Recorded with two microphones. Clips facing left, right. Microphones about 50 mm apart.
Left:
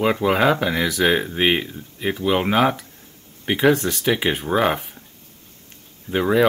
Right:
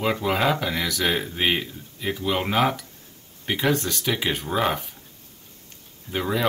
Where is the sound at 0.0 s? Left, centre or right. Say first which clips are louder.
Left 5 dB; centre.